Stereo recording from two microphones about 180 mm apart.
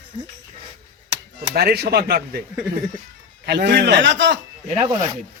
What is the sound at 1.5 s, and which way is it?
Speech, 60° right (ahead or behind).